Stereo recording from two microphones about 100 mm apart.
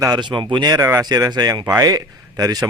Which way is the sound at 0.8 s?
30° right (ahead or behind).